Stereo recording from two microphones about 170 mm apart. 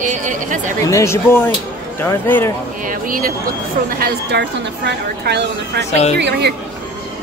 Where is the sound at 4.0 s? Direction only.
85° right.